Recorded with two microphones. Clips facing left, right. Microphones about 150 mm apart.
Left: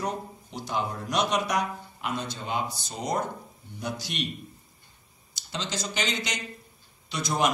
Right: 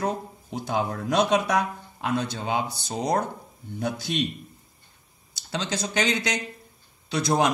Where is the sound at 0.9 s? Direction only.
60° right (ahead or behind).